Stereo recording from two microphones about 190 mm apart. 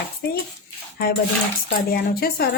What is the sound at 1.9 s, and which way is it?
Speech, 55° left (ahead or behind).